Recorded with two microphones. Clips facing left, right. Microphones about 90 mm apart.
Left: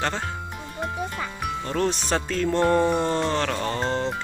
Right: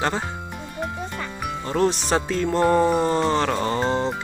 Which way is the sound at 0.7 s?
Centre (ahead or behind).